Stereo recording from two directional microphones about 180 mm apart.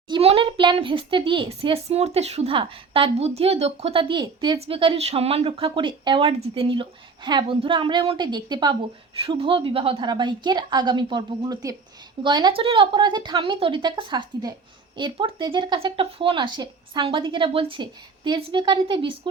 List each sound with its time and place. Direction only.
0.1 s a child's voice: 30° right (ahead or behind)